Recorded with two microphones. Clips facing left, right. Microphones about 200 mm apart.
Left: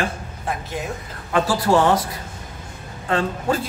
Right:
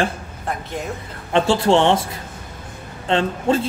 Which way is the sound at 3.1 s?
25° right (ahead or behind).